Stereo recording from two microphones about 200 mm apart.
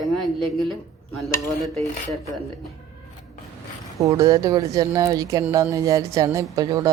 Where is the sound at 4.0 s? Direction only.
15° right (ahead or behind).